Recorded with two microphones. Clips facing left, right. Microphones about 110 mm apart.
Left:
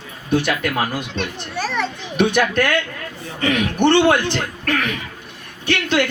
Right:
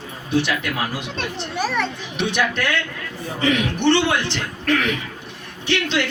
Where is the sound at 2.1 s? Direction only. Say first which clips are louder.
Left 6 dB; 50° left (ahead or behind).